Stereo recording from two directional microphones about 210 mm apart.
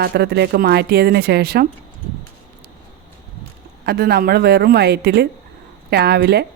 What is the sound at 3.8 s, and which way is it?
A woman's voice, 50° right (ahead or behind).